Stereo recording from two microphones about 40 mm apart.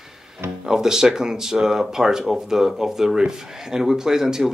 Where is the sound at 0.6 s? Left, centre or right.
Centre.